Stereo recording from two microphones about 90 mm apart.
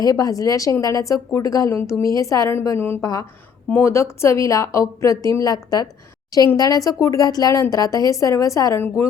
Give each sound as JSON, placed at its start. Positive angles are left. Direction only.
{"t": 0.0, "sound": "speech", "side_deg": 45}
{"t": 3.0, "sound": "speech", "side_deg": 40}
{"t": 3.7, "sound": "speech", "side_deg": 30}
{"t": 6.6, "sound": "speech", "side_deg": 40}